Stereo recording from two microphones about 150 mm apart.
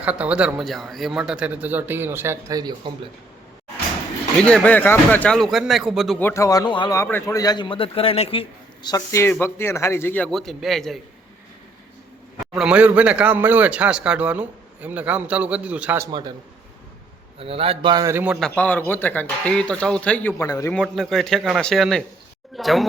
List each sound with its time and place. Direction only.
0.0 s a man's voice: 10° right (ahead or behind); by 3.1 s 30° right (ahead or behind)
4.4 s speech: 10° left (ahead or behind)
6.1 s a man's voice: 15° left (ahead or behind)
10.3 s speech: centre (ahead or behind)
12.5 s a man's voice: 5° right (ahead or behind)
17.4 s a man's voice: 40° right (ahead or behind)
18.0 s a man's voice: 15° right (ahead or behind)
18.3 s speech: 5° left (ahead or behind)
20.4 s a man's voice: 20° left (ahead or behind)
20.7 s speech: centre (ahead or behind)